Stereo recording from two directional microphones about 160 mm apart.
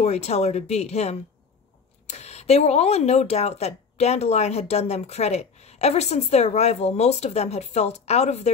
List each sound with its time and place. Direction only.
0.0 s speech: 45° left (ahead or behind)